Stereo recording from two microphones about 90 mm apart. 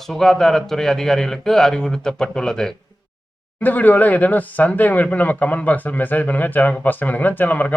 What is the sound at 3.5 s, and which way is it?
Speech, 20° left (ahead or behind).